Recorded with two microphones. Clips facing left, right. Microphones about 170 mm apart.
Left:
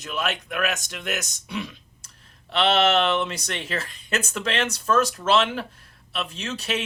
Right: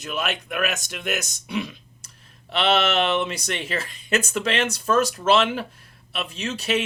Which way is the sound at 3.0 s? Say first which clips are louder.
Even; 10° right (ahead or behind).